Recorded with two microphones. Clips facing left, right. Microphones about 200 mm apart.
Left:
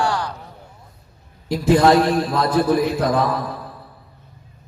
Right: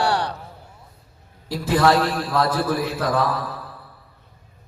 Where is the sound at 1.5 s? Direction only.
20° left (ahead or behind).